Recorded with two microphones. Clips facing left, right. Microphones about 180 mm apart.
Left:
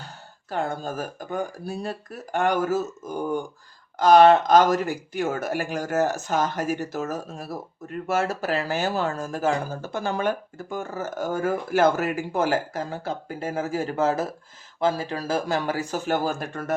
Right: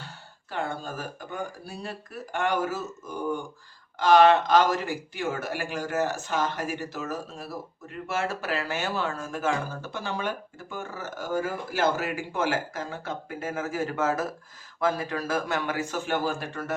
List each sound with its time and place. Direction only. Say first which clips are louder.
0.5 s speech: left 4 dB; 40° left (ahead or behind)
3.9 s speech: left 4 dB; 40° left (ahead or behind)